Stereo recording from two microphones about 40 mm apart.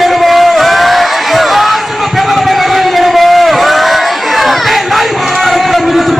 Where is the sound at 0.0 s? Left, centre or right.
Centre.